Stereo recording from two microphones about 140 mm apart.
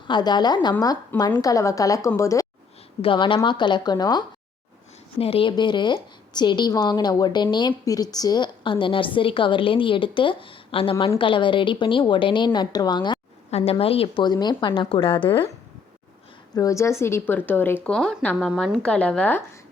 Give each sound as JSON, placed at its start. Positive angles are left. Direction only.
{"t": 0.1, "sound": "a woman's voice", "side_deg": 30}
{"t": 3.0, "sound": "speech", "side_deg": 35}
{"t": 5.2, "sound": "speech", "side_deg": 40}
{"t": 13.5, "sound": "a woman's voice", "side_deg": 45}
{"t": 14.3, "sound": "speech", "side_deg": 30}
{"t": 16.6, "sound": "a woman's voice", "side_deg": 25}